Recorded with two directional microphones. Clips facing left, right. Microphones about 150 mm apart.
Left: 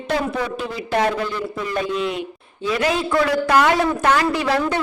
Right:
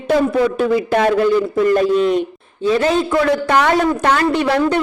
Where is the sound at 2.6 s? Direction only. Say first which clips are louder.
Right 5 dB; 30° right (ahead or behind).